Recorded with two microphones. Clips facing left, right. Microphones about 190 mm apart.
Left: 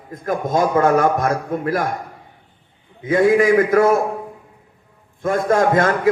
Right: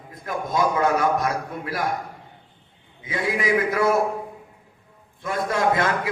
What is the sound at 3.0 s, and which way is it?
Speech, 50° left (ahead or behind).